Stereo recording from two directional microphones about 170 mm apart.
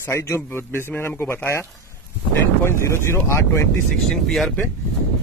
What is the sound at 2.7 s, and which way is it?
Speech, 15° left (ahead or behind).